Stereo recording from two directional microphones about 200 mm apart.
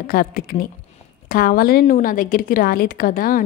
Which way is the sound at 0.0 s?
45° left (ahead or behind).